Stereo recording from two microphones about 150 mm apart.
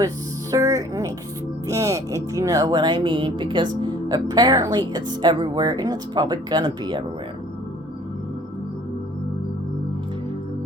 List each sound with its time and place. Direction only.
0.5 s music: 25° right (ahead or behind)
1.6 s speech: 20° right (ahead or behind)